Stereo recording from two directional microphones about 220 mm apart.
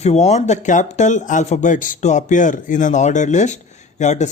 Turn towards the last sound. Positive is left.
turn(degrees=30)  # may be behind; listen again after turning